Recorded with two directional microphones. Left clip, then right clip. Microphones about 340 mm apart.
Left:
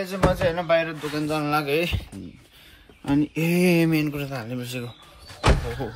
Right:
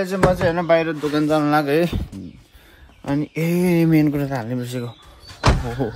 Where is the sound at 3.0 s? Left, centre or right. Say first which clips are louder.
Right 1 dB; right.